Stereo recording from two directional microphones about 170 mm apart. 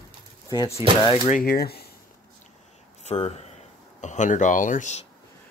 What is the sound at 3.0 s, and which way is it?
Speech, 40° left (ahead or behind).